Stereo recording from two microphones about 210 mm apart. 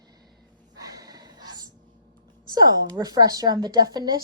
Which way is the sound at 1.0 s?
20° right (ahead or behind).